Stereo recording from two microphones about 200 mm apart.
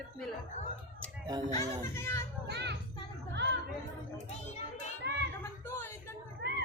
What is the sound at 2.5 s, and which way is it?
Children playing, 55° right (ahead or behind).